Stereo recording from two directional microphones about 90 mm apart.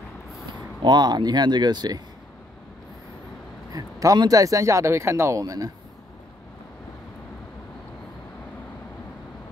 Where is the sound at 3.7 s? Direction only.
45° right (ahead or behind).